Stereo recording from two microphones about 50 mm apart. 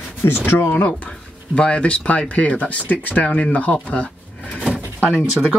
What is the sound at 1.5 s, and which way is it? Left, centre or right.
Speech, left.